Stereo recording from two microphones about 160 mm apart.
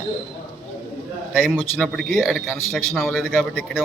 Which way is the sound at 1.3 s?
5° right (ahead or behind).